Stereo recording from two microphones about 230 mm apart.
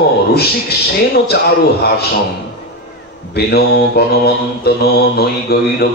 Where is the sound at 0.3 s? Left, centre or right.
Left.